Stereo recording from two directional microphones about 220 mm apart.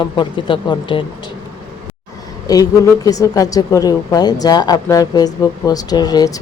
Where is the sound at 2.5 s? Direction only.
15° left (ahead or behind).